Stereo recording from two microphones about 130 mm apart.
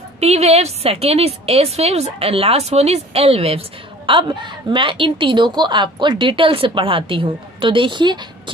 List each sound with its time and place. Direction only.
0.2 s a woman's voice: 55° right (ahead or behind); by 8.2 s 35° right (ahead or behind)